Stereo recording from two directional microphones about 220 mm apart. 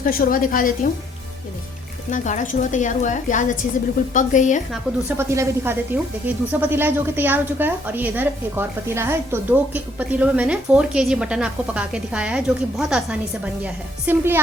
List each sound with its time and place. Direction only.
0.0 s a woman's voice: 40° left (ahead or behind)
2.0 s a woman's voice: 35° left (ahead or behind)
4.7 s a woman's voice: 10° right (ahead or behind)